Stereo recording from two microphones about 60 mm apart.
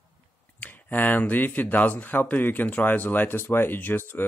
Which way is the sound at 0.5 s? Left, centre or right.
Left.